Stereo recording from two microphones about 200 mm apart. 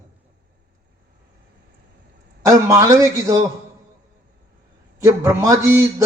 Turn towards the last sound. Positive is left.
turn(degrees=-15)  # may be behind; listen again after turning